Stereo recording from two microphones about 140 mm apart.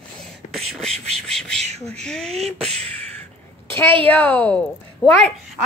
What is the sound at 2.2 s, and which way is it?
Beatboxing, 50° right (ahead or behind).